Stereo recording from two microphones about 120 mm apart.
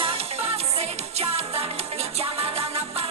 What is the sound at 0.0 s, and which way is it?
Music, 55° right (ahead or behind).